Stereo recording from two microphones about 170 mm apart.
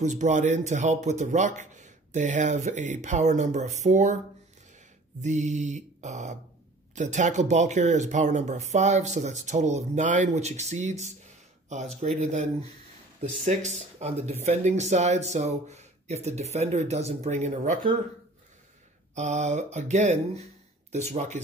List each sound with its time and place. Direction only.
0.0 s speech: 45° right (ahead or behind)
19.1 s speech: 45° right (ahead or behind)